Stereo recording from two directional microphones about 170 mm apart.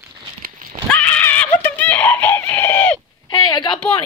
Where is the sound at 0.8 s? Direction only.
10° left (ahead or behind).